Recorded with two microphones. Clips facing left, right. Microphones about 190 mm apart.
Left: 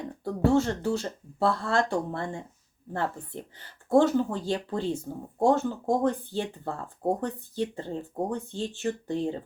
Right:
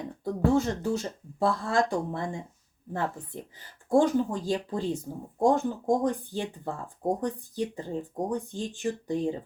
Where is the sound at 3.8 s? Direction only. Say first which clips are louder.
Left 1 dB; 15° right (ahead or behind).